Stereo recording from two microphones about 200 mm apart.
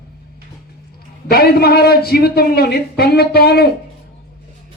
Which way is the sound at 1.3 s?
50° left (ahead or behind).